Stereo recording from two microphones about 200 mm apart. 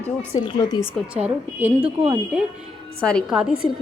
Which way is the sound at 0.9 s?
5° right (ahead or behind).